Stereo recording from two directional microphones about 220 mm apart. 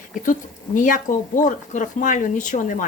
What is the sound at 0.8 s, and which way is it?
Speech, 35° left (ahead or behind).